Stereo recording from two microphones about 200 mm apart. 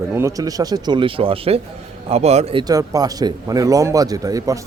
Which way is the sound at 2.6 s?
20° right (ahead or behind).